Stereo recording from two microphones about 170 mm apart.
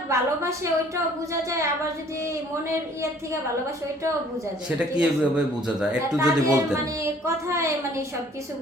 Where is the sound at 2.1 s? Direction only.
15° right (ahead or behind).